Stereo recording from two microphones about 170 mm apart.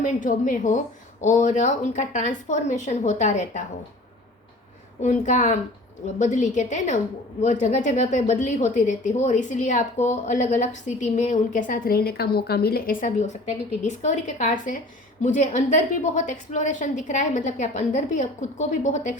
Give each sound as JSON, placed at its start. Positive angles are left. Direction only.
{"t": 0.2, "sound": "a woman's voice", "side_deg": 50}
{"t": 5.0, "sound": "a woman's voice", "side_deg": 45}